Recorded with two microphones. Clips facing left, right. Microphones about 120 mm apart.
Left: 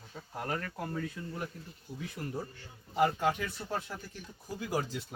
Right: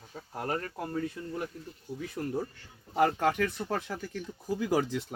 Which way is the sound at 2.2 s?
45° right (ahead or behind).